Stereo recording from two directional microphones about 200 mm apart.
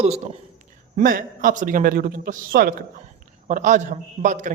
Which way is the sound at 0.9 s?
45° right (ahead or behind).